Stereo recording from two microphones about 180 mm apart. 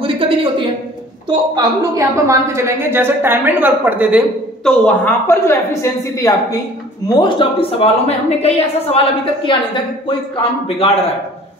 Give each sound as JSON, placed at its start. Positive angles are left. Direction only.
{"t": 0.0, "sound": "a sound", "side_deg": -30}
{"t": 1.5, "sound": "a woman's voice", "side_deg": -15}
{"t": 4.6, "sound": "a woman's voice", "side_deg": 5}